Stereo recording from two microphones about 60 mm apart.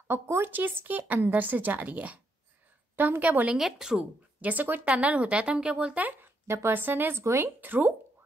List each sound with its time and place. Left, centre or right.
0.1 s a woman's voice: right
3.5 s speech: centre
4.4 s a woman's voice: right
6.4 s speech: right